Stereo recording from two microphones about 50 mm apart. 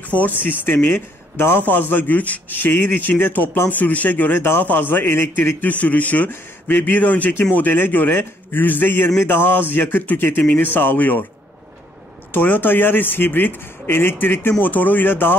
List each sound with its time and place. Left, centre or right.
0.4 s a man's voice: left
2.6 s speech: left
3.7 s speech: left
5.7 s a man's voice: left
12.3 s a man's voice: left